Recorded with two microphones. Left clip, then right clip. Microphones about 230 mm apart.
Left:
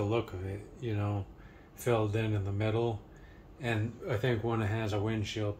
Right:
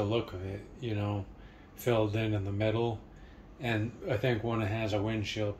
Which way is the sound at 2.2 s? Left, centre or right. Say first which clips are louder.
Right 3 dB; left.